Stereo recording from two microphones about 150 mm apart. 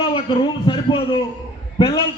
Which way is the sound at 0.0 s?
40° left (ahead or behind).